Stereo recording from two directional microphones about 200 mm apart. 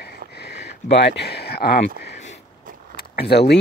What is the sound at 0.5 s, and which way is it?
Speech, 60° left (ahead or behind).